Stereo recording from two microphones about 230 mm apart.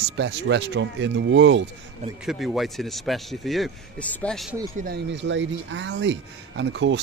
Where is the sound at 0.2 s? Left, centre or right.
Right.